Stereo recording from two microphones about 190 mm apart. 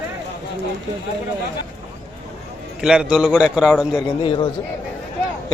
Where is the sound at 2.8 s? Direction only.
5° right (ahead or behind).